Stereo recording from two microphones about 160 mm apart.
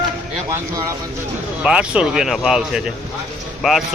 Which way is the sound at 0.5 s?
20° right (ahead or behind).